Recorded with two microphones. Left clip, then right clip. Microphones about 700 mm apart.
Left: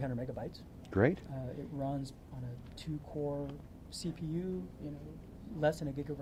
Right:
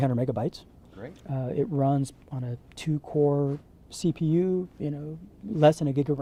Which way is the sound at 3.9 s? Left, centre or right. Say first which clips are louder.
Right 15 dB; right.